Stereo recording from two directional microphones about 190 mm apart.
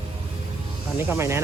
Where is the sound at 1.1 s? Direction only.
15° right (ahead or behind).